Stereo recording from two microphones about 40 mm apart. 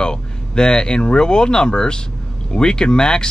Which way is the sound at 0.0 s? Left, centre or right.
Left.